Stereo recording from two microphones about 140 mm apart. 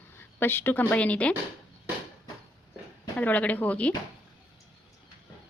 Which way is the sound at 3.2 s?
10° left (ahead or behind).